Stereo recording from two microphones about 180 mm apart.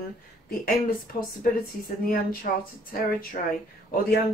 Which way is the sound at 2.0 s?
50° left (ahead or behind).